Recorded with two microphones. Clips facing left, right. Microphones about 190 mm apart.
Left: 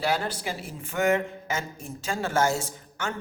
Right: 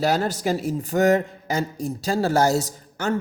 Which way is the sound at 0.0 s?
40° right (ahead or behind).